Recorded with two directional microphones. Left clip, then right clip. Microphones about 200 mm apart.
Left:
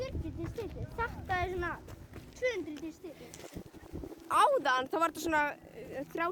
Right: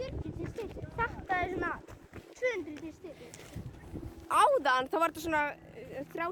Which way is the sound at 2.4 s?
15° left (ahead or behind).